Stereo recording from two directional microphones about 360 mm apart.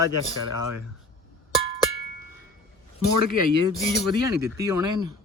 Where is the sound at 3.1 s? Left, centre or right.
Right.